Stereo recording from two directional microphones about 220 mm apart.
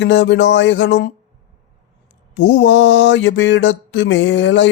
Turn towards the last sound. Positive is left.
turn(degrees=55)  # may be behind; listen again after turning